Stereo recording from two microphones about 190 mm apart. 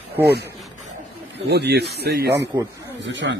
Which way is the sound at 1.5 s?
60° right (ahead or behind).